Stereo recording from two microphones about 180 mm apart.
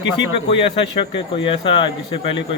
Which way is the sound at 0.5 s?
30° left (ahead or behind).